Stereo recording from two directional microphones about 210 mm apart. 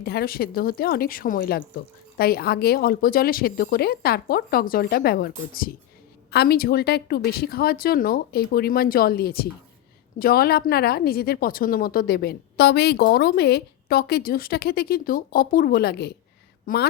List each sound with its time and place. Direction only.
0.0 s a woman's voice: 50° left (ahead or behind)